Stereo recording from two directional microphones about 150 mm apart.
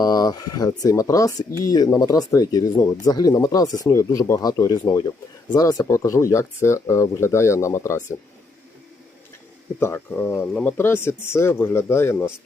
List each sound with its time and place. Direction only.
0.0 s speech: 25° left (ahead or behind)
9.8 s speech: 15° left (ahead or behind)